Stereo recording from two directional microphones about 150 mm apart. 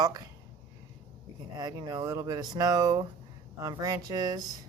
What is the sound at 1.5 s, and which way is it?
Speech, 25° right (ahead or behind).